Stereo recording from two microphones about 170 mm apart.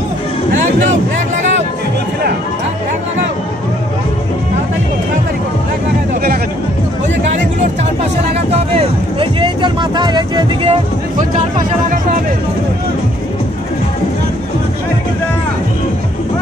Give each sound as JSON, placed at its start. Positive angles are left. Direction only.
{"t": 8.5, "sound": "speech", "side_deg": -35}